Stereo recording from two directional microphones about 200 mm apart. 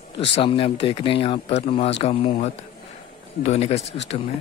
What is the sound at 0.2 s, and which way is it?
Speech, 30° left (ahead or behind).